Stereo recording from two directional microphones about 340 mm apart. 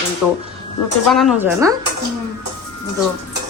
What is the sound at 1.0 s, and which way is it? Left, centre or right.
Speech, centre.